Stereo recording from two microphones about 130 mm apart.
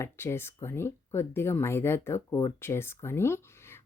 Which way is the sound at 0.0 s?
20° left (ahead or behind).